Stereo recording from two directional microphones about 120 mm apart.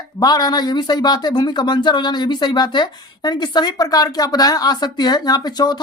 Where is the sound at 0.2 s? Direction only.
35° left (ahead or behind).